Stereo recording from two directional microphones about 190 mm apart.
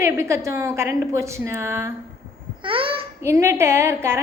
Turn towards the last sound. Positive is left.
turn(degrees=-15)  # may be behind; listen again after turning